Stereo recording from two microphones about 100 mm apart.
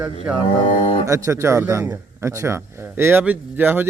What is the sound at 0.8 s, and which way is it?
Speech, 75° left (ahead or behind).